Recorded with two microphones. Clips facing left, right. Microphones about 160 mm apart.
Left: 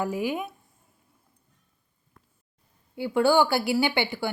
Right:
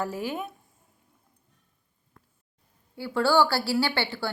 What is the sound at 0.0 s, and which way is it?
Speech, 15° left (ahead or behind).